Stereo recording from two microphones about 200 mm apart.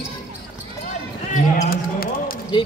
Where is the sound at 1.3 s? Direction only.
45° left (ahead or behind).